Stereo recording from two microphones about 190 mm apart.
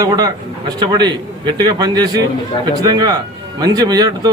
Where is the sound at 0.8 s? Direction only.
25° right (ahead or behind).